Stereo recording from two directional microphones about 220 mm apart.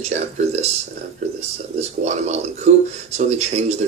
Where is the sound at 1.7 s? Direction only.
30° right (ahead or behind).